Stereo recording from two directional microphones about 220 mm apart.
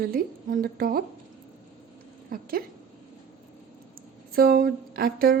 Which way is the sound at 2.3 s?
40° right (ahead or behind).